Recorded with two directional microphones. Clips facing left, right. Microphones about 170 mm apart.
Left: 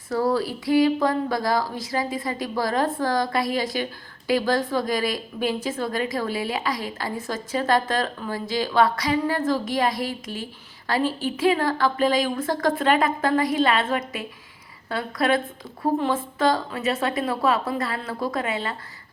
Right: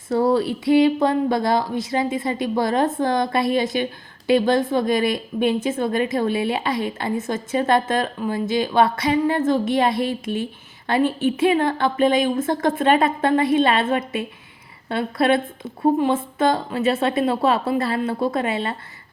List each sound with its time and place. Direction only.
0.1 s a woman's voice: 25° right (ahead or behind)